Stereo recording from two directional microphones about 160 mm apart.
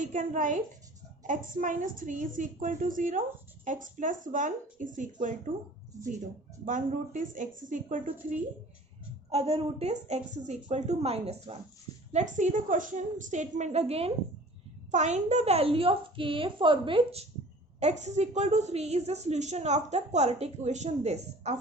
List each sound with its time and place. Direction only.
0.0 s a woman's voice: 55° right (ahead or behind)
6.7 s a woman's voice: 55° right (ahead or behind)
9.3 s a woman's voice: 40° right (ahead or behind)